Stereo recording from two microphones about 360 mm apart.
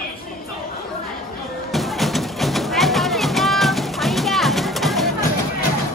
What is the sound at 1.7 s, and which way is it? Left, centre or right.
Music, centre.